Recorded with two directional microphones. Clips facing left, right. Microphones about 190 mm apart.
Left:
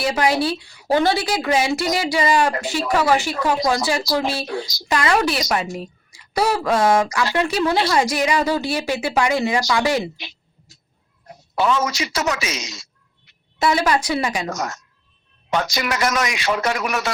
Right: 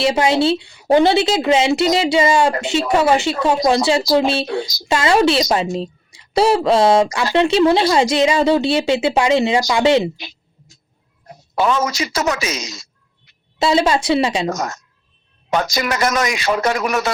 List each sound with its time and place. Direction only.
0.0 s speech: 25° right (ahead or behind)
11.5 s speech: 45° right (ahead or behind)
13.6 s speech: 25° right (ahead or behind)
14.5 s a woman's voice: 45° right (ahead or behind)